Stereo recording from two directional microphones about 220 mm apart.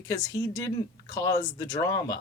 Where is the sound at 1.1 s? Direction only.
15° left (ahead or behind).